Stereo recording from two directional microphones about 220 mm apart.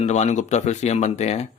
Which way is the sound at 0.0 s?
30° left (ahead or behind).